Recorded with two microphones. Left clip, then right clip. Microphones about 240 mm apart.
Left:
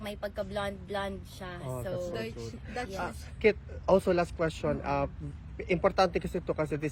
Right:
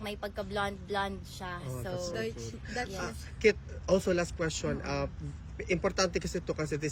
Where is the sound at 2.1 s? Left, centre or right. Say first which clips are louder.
Right 1 dB; left.